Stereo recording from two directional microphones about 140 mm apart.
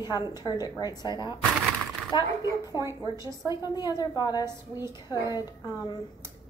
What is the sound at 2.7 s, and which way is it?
Speech, 20° right (ahead or behind).